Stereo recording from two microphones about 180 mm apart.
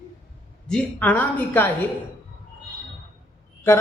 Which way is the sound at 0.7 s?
5° left (ahead or behind).